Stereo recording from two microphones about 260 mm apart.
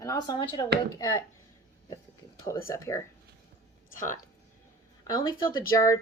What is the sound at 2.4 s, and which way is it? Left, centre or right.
Speech, centre.